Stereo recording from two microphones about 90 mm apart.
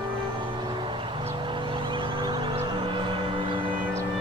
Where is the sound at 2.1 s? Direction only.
60° right (ahead or behind).